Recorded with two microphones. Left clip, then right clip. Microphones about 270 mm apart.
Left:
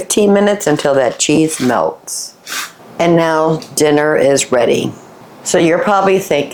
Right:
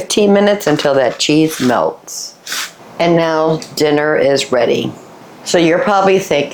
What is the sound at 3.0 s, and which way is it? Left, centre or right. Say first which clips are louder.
Speech: left 1 dB; left.